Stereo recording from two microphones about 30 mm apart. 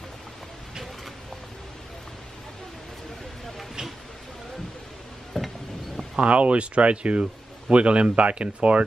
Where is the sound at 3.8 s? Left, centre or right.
Right.